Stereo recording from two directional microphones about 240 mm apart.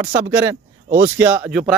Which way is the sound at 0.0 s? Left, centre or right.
Centre.